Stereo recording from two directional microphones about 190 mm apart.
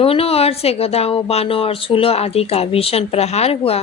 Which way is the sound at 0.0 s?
30° left (ahead or behind).